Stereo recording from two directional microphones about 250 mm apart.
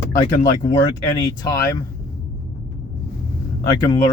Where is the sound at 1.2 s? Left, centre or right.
Centre.